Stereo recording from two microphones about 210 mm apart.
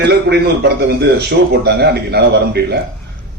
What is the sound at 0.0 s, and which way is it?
A man's voice, 50° right (ahead or behind).